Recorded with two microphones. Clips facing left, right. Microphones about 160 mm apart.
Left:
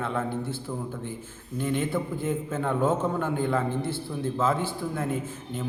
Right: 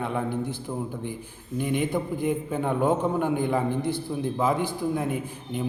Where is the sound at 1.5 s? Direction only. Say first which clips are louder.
Right 1 dB; 15° right (ahead or behind).